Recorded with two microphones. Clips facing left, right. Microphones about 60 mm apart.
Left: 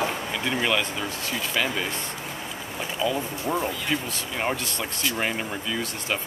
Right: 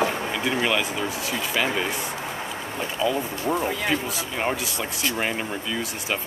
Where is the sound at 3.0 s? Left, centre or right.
Centre.